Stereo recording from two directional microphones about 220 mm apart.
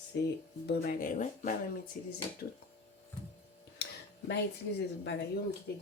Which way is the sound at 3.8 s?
50° left (ahead or behind).